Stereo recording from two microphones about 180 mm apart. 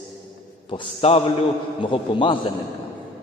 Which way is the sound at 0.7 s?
30° left (ahead or behind).